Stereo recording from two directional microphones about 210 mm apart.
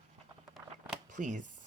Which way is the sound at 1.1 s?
35° right (ahead or behind).